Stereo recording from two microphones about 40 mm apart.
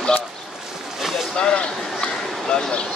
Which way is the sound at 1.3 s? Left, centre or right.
Left.